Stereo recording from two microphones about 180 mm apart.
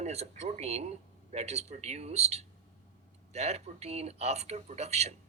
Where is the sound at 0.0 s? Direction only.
35° right (ahead or behind).